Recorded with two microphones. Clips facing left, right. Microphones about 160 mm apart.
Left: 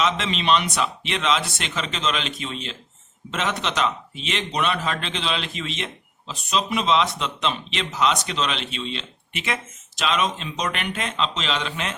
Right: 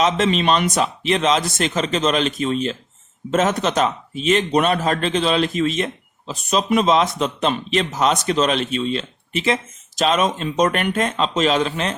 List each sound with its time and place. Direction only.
0.0 s a man's voice: 45° right (ahead or behind)